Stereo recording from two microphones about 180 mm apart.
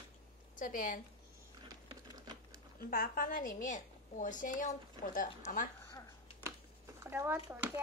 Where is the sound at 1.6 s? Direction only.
20° right (ahead or behind).